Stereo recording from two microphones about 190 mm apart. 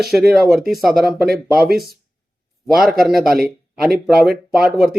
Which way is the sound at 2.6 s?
Centre (ahead or behind).